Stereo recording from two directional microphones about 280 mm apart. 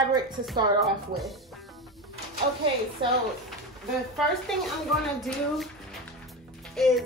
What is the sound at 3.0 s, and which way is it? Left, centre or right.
Speech, centre.